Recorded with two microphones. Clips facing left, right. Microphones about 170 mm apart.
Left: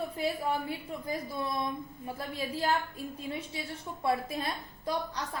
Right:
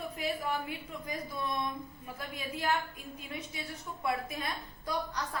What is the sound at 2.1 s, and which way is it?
A woman's voice, 30° left (ahead or behind).